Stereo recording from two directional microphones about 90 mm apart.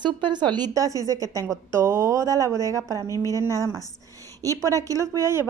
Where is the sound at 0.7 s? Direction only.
40° right (ahead or behind).